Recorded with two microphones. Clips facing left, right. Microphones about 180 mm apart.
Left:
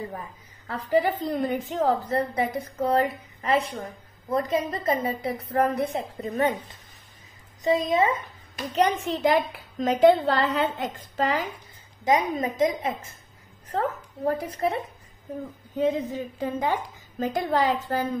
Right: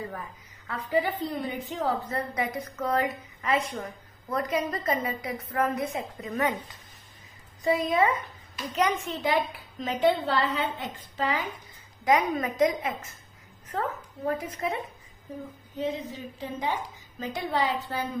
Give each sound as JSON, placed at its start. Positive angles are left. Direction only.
{"t": 0.8, "sound": "a woman's voice", "side_deg": 40}
{"t": 7.6, "sound": "a woman's voice", "side_deg": 20}
{"t": 8.7, "sound": "a woman's voice", "side_deg": 35}
{"t": 12.0, "sound": "a woman's voice", "side_deg": 20}
{"t": 15.8, "sound": "a woman's voice", "side_deg": 50}